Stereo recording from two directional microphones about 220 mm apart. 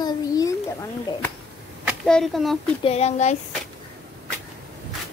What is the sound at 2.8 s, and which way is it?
Speech, 30° left (ahead or behind).